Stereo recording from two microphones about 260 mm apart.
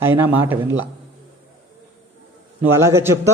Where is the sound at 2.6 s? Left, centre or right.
Centre.